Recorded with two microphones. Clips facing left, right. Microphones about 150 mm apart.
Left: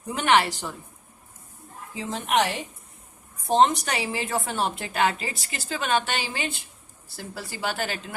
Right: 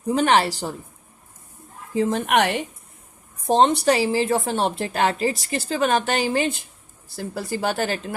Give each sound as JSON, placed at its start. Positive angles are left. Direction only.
{"t": 0.0, "sound": "a woman's voice", "side_deg": -35}
{"t": 2.0, "sound": "speech", "side_deg": -55}
{"t": 3.6, "sound": "a woman's voice", "side_deg": -30}